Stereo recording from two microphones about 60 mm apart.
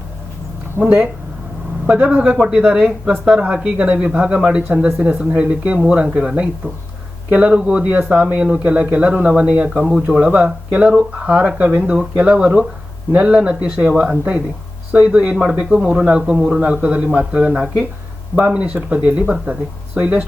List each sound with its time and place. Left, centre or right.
0.8 s speech: centre